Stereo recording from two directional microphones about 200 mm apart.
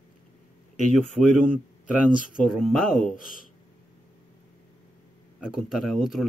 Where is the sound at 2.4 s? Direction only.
Centre (ahead or behind).